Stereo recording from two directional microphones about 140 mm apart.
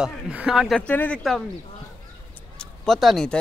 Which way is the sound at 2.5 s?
5° left (ahead or behind).